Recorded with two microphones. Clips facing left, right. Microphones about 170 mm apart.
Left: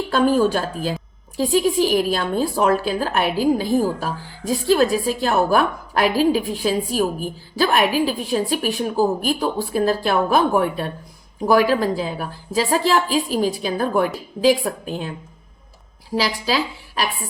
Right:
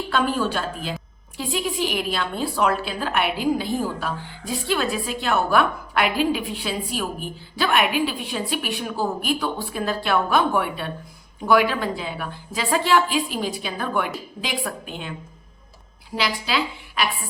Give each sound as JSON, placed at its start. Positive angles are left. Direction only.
{"t": 0.1, "sound": "a woman's voice", "side_deg": 40}
{"t": 16.1, "sound": "a woman's voice", "side_deg": 35}